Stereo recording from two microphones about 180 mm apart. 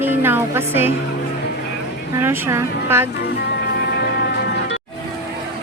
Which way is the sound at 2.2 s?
15° right (ahead or behind).